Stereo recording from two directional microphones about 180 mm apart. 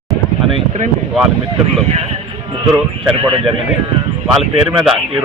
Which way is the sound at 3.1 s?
30° right (ahead or behind).